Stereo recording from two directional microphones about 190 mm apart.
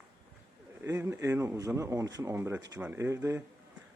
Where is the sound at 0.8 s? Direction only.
10° right (ahead or behind).